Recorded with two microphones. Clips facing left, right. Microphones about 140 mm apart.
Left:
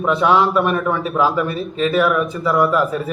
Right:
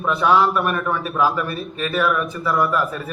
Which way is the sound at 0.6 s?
Centre (ahead or behind).